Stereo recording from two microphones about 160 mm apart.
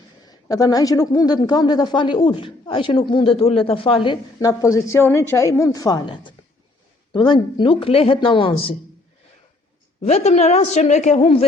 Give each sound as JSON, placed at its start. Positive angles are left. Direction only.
{"t": 0.3, "sound": "speech", "side_deg": 25}
{"t": 10.0, "sound": "a woman's voice", "side_deg": 45}